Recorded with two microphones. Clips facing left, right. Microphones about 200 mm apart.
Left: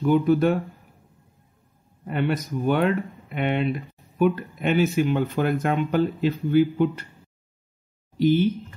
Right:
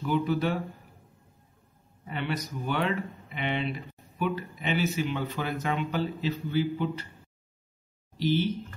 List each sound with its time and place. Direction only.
0.0 s speech: 50° left (ahead or behind)
2.0 s speech: 50° left (ahead or behind)
8.2 s speech: 50° left (ahead or behind)